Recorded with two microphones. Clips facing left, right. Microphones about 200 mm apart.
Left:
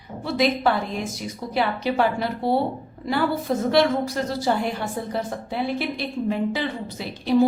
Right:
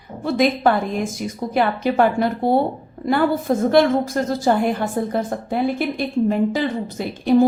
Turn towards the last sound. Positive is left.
turn(degrees=-50)  # may be behind; listen again after turning